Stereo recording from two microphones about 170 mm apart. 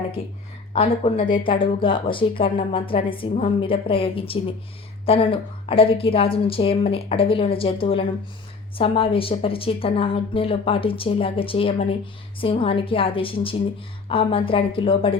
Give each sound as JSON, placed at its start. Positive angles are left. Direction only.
{"t": 0.7, "sound": "speech", "side_deg": 35}